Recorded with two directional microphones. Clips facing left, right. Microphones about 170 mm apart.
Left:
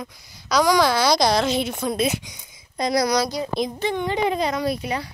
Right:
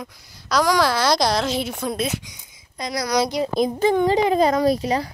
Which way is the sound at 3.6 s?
45° right (ahead or behind).